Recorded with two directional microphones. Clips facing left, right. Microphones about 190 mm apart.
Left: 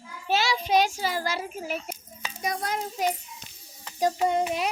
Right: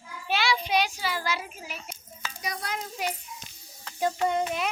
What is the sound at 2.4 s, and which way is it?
Speech, 50° left (ahead or behind).